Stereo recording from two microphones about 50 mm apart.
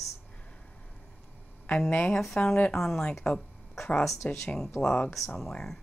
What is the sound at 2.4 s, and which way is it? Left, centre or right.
Speech, left.